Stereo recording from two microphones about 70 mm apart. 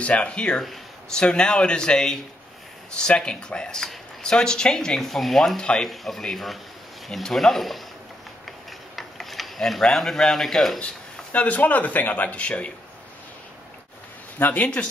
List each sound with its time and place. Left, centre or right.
0.0 s speech: centre
8.5 s mechanisms: centre
11.3 s speech: left
14.4 s speech: left